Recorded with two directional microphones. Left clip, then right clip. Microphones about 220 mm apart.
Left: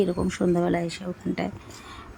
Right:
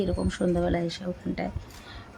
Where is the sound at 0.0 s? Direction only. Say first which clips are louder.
Left 3 dB; 10° left (ahead or behind).